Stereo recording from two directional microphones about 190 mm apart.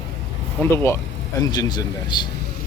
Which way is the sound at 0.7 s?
10° left (ahead or behind).